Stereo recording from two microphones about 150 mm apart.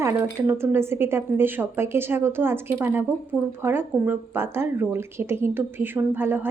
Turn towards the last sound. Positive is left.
turn(degrees=-15)  # may be behind; listen again after turning